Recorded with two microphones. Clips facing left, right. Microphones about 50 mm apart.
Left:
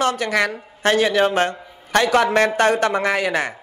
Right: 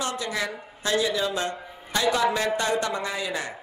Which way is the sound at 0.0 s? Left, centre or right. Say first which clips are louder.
Left 9 dB; left.